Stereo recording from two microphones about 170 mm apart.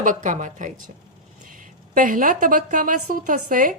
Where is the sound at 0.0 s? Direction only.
50° right (ahead or behind).